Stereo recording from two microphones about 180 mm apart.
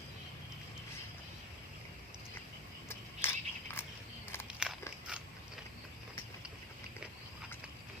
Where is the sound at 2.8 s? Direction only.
15° left (ahead or behind).